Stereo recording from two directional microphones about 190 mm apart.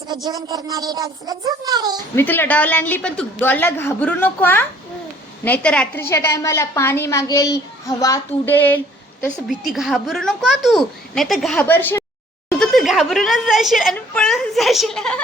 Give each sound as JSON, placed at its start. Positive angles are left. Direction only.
{"t": 0.3, "sound": "a woman's voice", "side_deg": -20}
{"t": 2.1, "sound": "a woman's voice", "side_deg": 10}
{"t": 9.5, "sound": "speech", "side_deg": 0}